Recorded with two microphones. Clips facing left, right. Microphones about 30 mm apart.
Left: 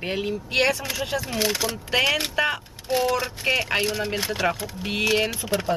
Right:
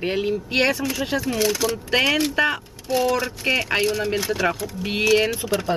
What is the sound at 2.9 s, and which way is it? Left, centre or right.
Speech, centre.